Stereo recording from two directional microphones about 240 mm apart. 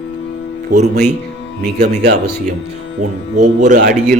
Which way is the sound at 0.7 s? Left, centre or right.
Right.